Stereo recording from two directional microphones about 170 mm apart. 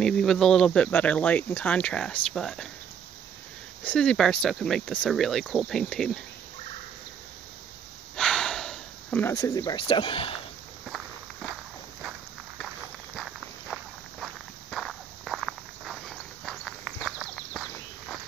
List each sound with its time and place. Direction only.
0.0 s speech: 5° left (ahead or behind)
3.8 s speech: 5° left (ahead or behind)
8.2 s a sound: 5° left (ahead or behind)
9.3 s speech: 20° left (ahead or behind)
13.1 s walk: centre (ahead or behind)